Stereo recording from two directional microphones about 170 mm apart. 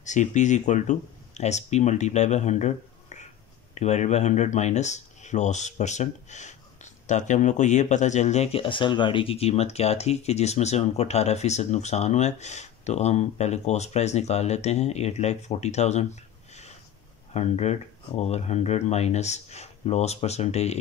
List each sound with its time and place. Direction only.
0.0 s speech: 45° left (ahead or behind)